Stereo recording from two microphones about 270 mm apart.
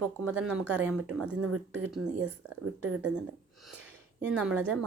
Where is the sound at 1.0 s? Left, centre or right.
Right.